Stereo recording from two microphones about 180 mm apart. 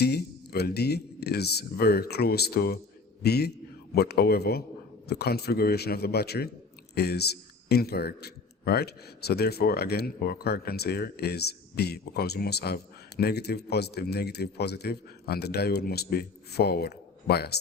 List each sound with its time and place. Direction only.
0.0 s speech: 60° left (ahead or behind)